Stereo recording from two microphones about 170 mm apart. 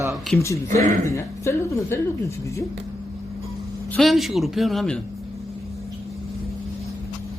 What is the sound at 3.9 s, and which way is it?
Speech, centre (ahead or behind).